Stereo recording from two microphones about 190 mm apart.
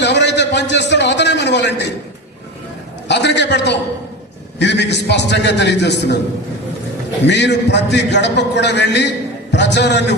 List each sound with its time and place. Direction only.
0.0 s a sound: 65° left (ahead or behind)
3.1 s a man's voice: 65° left (ahead or behind)
7.3 s a man's voice: 65° left (ahead or behind)